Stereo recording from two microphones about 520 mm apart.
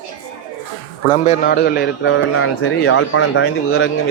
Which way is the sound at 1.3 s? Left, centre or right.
Centre.